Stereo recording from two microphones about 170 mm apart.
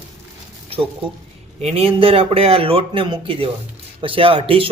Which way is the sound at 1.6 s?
35° right (ahead or behind).